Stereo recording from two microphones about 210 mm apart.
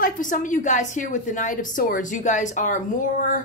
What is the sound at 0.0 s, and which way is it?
A woman's voice, 40° left (ahead or behind).